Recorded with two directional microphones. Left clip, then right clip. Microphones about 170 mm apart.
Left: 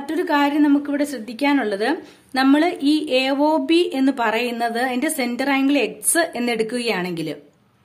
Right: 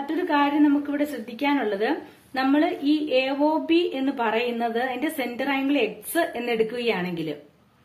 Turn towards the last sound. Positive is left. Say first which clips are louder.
# left 3 dB
turn(degrees=35)  # may be behind; listen again after turning